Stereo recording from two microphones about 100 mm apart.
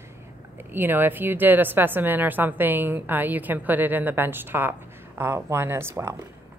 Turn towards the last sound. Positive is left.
turn(degrees=-25)  # may be behind; listen again after turning